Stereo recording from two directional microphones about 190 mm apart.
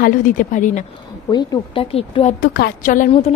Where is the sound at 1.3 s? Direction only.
25° left (ahead or behind).